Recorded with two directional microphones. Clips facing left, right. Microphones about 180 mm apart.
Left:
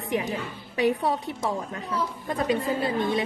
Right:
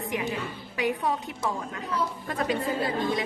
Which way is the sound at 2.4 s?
25° left (ahead or behind).